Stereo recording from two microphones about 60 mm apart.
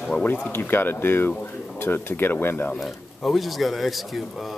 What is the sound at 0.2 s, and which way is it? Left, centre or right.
Speech, left.